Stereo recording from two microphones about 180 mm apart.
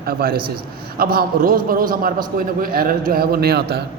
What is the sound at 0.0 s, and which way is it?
A man's voice, 55° right (ahead or behind).